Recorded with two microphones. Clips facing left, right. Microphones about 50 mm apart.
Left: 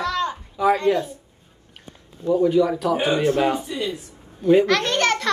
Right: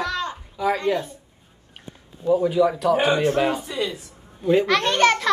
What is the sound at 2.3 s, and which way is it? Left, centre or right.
A child's voice, centre.